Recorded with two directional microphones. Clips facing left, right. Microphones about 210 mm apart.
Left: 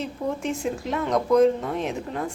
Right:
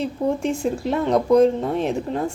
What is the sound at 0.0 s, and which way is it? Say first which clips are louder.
Speech: right 6 dB; 30° right (ahead or behind).